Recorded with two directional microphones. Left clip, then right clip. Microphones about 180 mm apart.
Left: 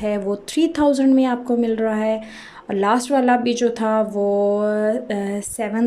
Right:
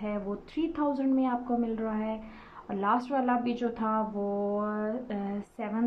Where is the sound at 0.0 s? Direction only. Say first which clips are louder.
Left 13 dB; 25° left (ahead or behind).